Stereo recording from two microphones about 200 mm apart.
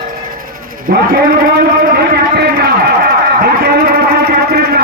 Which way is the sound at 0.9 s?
45° right (ahead or behind).